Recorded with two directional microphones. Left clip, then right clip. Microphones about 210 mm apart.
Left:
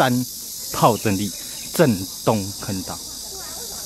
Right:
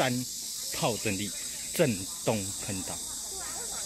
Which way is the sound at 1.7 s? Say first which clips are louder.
Left 9 dB; 15° left (ahead or behind).